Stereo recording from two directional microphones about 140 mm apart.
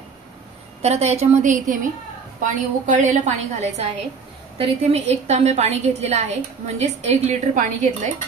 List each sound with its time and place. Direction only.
0.8 s a woman's voice: 50° right (ahead or behind)